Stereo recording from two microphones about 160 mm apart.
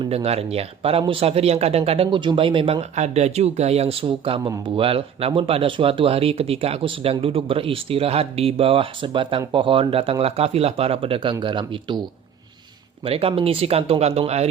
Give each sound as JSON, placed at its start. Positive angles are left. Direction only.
{"t": 0.0, "sound": "speech", "side_deg": -40}
{"t": 13.1, "sound": "speech", "side_deg": -35}